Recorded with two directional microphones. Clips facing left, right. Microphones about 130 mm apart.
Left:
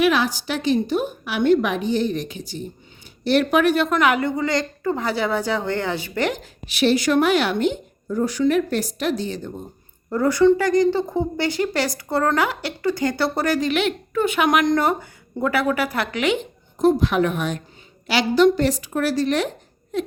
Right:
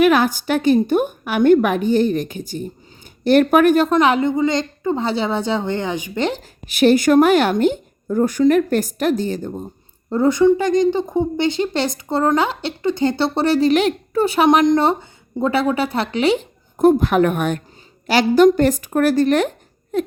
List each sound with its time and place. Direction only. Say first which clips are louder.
0.0 s a woman's voice: right 5 dB; 50° right (ahead or behind)
3.8 s a woman's voice: right 4 dB; 25° right (ahead or behind)
6.7 s a woman's voice: right 5 dB; 45° right (ahead or behind)
10.1 s a woman's voice: right 2 dB; 20° right (ahead or behind)
16.7 s a woman's voice: right 4 dB; 55° right (ahead or behind)